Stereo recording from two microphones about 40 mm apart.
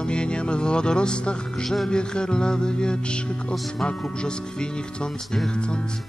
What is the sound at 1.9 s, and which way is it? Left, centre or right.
Music, left.